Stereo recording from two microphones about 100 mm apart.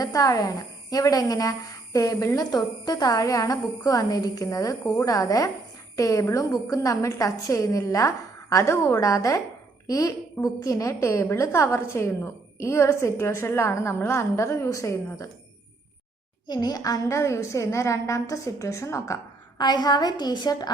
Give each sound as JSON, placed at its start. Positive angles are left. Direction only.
{"t": 0.0, "sound": "a woman's voice", "side_deg": 35}
{"t": 16.5, "sound": "a woman's voice", "side_deg": 45}